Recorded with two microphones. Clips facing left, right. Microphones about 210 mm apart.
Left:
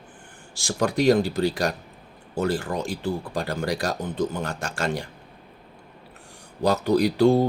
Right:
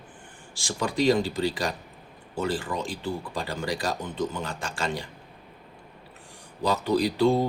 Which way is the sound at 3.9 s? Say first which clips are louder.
Left 3 dB; 40° left (ahead or behind).